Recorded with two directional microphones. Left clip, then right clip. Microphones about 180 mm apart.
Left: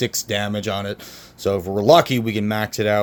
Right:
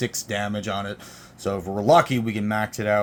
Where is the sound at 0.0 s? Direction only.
45° left (ahead or behind).